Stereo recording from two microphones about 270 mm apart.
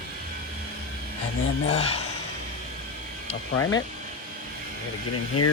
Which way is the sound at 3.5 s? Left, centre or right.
Left.